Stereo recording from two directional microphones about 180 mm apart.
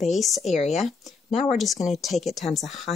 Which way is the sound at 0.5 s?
40° left (ahead or behind).